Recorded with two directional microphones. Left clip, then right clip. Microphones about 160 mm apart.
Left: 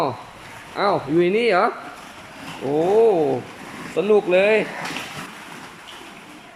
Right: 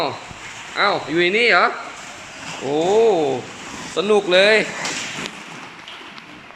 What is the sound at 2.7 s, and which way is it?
A man's voice, 10° left (ahead or behind).